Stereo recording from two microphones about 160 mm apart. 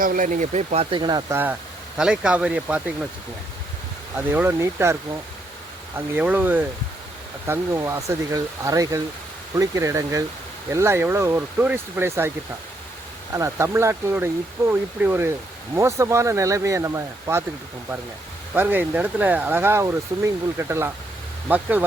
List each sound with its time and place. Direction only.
0.0 s speech: 55° right (ahead or behind); by 1.2 s 30° right (ahead or behind)
1.3 s speech: 15° right (ahead or behind)
4.3 s speech: 15° right (ahead or behind)
6.1 s speech: 10° right (ahead or behind)
13.3 s speech: 20° right (ahead or behind)
18.5 s speech: 10° right (ahead or behind)